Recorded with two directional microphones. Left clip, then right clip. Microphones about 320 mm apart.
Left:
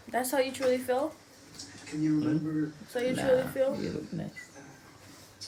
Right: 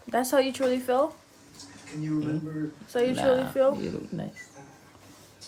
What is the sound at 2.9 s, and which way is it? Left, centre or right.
Speech, right.